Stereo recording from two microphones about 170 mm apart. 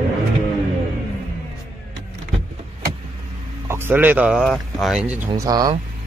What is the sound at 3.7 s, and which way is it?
Speech, 15° right (ahead or behind).